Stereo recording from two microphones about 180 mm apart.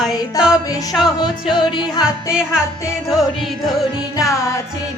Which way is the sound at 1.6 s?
25° left (ahead or behind).